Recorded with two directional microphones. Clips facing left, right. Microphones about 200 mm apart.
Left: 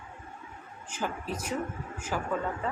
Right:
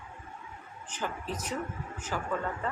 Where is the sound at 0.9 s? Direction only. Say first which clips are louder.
Left 2 dB; 10° left (ahead or behind).